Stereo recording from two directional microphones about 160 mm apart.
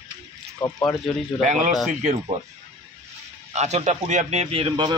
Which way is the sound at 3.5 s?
45° right (ahead or behind).